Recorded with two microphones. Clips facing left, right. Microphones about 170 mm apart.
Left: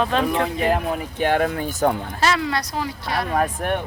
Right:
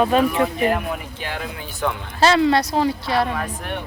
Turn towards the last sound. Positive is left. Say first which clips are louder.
# left 5 dB
turn(degrees=50)  # may be behind; listen again after turning